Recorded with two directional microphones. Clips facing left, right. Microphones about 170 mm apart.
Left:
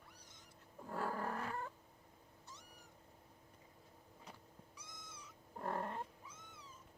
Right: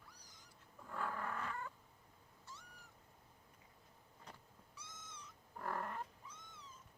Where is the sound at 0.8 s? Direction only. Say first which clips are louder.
Left 3 dB; 35° left (ahead or behind).